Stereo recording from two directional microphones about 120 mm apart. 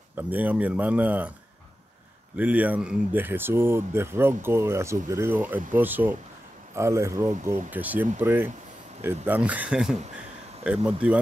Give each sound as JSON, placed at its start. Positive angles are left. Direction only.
{"t": 0.2, "sound": "speech", "side_deg": -15}
{"t": 2.3, "sound": "speech", "side_deg": -10}